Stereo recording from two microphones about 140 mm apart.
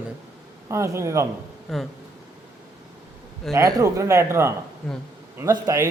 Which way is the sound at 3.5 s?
20° right (ahead or behind).